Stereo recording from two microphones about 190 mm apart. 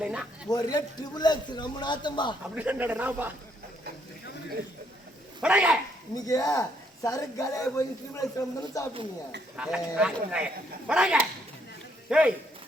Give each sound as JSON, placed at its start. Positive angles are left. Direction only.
{"t": 0.0, "sound": "a man's voice", "side_deg": -5}
{"t": 0.5, "sound": "a man's voice", "side_deg": 20}
{"t": 2.6, "sound": "a man's voice", "side_deg": -10}
{"t": 5.4, "sound": "speech", "side_deg": -5}
{"t": 6.2, "sound": "speech", "side_deg": 20}
{"t": 9.6, "sound": "a man's voice", "side_deg": -5}